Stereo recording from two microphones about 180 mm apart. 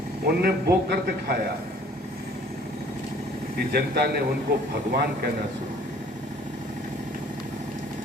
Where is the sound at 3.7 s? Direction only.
60° right (ahead or behind).